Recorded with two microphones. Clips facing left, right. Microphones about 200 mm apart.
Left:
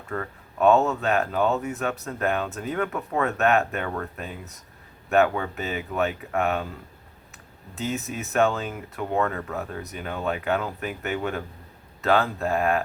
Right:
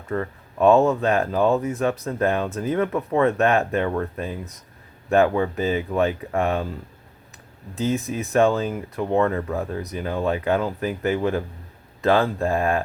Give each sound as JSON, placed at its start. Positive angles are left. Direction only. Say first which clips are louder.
{"t": 0.1, "sound": "speech", "louder": "right 5 dB", "side_deg": -30}
{"t": 7.8, "sound": "speech", "louder": "right 6 dB", "side_deg": -30}